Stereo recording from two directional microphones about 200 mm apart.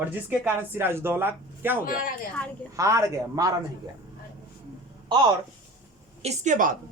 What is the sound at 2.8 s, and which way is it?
Speech, 15° right (ahead or behind).